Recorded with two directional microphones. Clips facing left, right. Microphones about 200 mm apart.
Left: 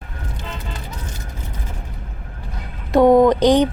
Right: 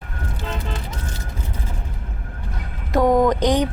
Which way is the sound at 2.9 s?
30° left (ahead or behind).